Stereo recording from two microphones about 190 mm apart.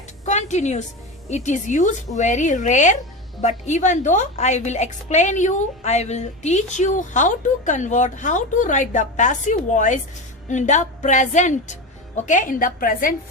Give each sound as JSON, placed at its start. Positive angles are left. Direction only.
{"t": 0.3, "sound": "music", "side_deg": 40}
{"t": 1.3, "sound": "a woman's voice", "side_deg": 40}